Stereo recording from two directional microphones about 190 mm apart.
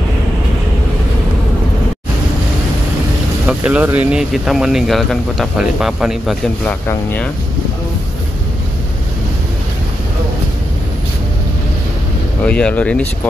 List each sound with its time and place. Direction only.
3.4 s speech: 5° right (ahead or behind); by 7.2 s 10° left (ahead or behind)
12.4 s speech: 5° left (ahead or behind)